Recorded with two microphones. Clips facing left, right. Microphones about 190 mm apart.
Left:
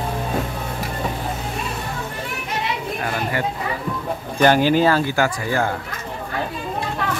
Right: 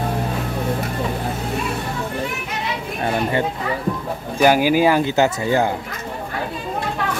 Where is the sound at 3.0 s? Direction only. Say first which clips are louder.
Right 6 dB; 25° right (ahead or behind).